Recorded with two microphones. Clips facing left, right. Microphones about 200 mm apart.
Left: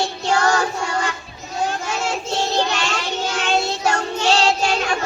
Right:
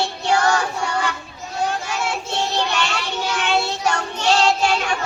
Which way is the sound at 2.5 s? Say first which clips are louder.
Left 1 dB; 40° left (ahead or behind).